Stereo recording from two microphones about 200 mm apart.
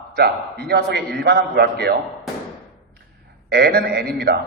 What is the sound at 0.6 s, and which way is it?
A man's voice, 55° right (ahead or behind).